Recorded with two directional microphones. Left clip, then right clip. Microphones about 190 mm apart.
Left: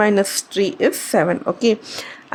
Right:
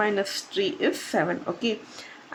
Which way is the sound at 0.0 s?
40° left (ahead or behind).